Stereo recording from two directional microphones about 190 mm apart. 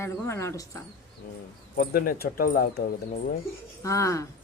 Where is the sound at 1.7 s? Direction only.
50° left (ahead or behind).